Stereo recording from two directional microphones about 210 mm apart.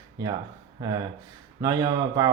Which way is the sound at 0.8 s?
20° right (ahead or behind).